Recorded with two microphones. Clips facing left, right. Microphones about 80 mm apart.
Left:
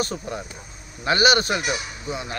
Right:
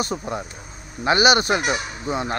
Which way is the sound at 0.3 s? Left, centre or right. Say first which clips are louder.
Right 3 dB; right.